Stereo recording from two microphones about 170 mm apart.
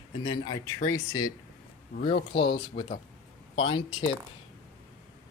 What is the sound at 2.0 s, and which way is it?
Speech, 30° left (ahead or behind).